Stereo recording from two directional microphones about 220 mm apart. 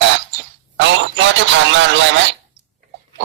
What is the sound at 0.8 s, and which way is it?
A man's voice, 55° right (ahead or behind).